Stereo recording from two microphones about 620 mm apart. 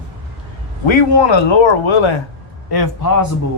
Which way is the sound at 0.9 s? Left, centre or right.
Left.